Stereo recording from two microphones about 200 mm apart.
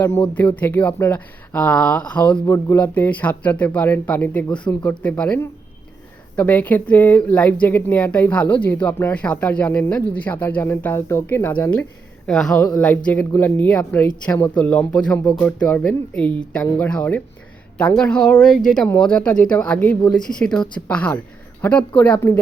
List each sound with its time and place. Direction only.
0.3 s speech: 10° left (ahead or behind)
4.4 s speech: 25° left (ahead or behind)
4.7 s speech: 10° left (ahead or behind)